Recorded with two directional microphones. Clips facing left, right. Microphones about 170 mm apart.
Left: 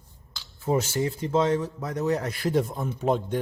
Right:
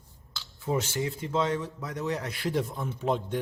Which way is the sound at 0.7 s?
40° left (ahead or behind).